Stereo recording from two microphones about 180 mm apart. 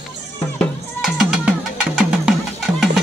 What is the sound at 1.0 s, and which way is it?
Music, 5° right (ahead or behind).